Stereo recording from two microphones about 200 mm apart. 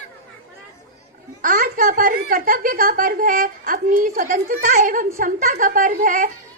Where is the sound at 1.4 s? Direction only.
45° right (ahead or behind).